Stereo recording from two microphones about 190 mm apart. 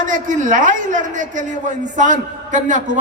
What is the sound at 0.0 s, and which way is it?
A man's voice, 45° right (ahead or behind).